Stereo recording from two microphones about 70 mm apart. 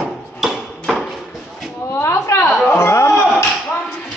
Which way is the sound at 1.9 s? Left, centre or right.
Left.